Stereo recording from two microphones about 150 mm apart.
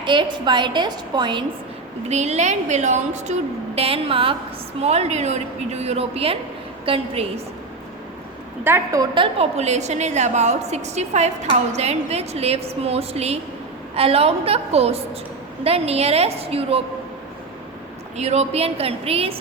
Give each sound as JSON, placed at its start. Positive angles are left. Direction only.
{"t": 0.0, "sound": "a woman's voice", "side_deg": -30}
{"t": 2.0, "sound": "a woman's voice", "side_deg": -50}
{"t": 3.8, "sound": "a woman's voice", "side_deg": -40}
{"t": 8.6, "sound": "a woman's voice", "side_deg": -20}
{"t": 9.1, "sound": "a woman's voice", "side_deg": -40}
{"t": 18.2, "sound": "a woman's voice", "side_deg": -45}